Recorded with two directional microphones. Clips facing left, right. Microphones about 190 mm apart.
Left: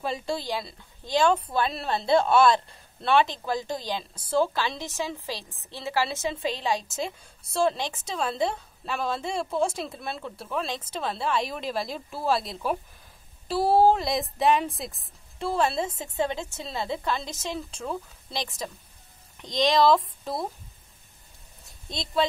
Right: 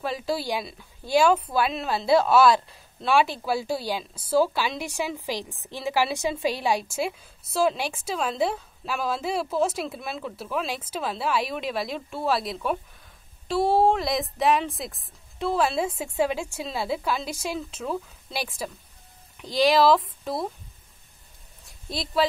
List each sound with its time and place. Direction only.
0.0 s a woman's voice: centre (ahead or behind)
21.8 s a woman's voice: 5° right (ahead or behind)